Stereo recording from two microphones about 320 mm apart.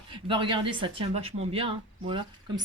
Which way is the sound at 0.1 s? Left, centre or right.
Centre.